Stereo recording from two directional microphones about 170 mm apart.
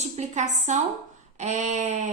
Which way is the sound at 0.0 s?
45° right (ahead or behind).